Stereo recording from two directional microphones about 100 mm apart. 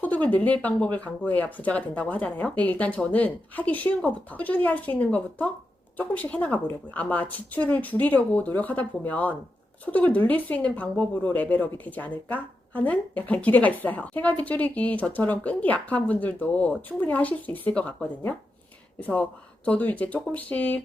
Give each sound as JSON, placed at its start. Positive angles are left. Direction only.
{"t": 0.0, "sound": "a woman's voice", "side_deg": 15}